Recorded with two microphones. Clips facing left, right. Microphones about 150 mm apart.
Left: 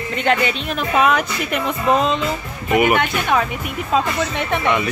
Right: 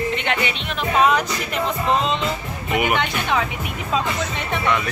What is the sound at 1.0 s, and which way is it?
Speech, 60° left (ahead or behind).